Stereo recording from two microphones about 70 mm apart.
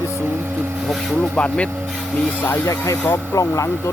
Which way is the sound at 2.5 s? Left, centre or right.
Left.